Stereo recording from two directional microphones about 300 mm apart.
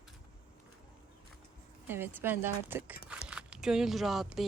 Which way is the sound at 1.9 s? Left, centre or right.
Centre.